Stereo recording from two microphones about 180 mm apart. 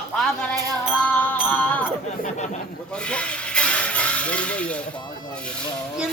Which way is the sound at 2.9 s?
5° left (ahead or behind).